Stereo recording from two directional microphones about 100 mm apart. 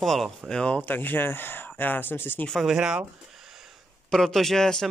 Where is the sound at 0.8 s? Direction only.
20° left (ahead or behind).